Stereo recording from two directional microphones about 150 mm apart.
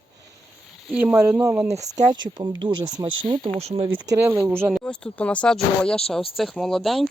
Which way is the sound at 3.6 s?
45° right (ahead or behind).